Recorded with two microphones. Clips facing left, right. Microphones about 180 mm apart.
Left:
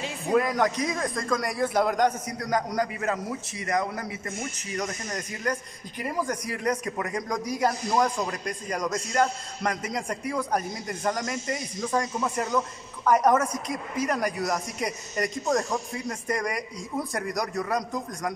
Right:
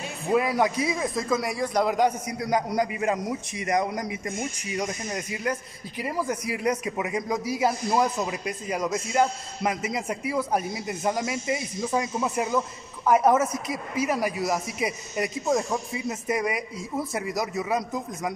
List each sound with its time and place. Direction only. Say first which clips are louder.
0.3 s a man's voice: right 1 dB; 10° right (ahead or behind)